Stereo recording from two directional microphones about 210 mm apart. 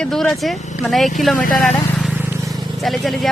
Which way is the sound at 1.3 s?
40° left (ahead or behind).